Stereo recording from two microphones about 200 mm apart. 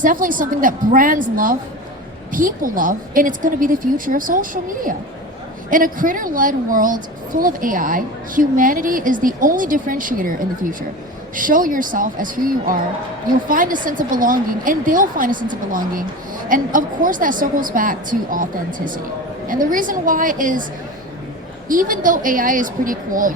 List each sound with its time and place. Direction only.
0.0 s speech: 40° right (ahead or behind)
19.5 s speech: 45° right (ahead or behind)
21.7 s speech: 40° right (ahead or behind)